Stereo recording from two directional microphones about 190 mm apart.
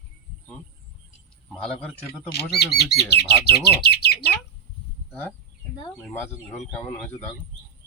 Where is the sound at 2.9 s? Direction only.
55° left (ahead or behind).